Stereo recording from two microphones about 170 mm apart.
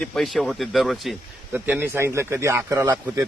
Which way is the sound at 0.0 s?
Centre (ahead or behind).